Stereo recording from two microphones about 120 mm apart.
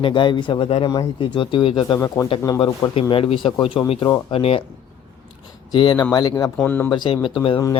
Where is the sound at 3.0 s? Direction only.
50° left (ahead or behind).